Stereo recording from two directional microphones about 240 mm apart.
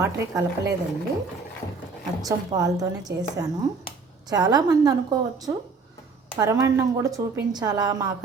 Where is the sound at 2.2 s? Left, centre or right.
Centre.